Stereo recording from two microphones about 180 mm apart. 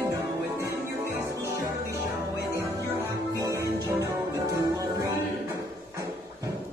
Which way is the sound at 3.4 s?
20° right (ahead or behind).